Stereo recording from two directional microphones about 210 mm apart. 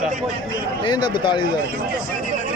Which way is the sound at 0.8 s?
20° left (ahead or behind).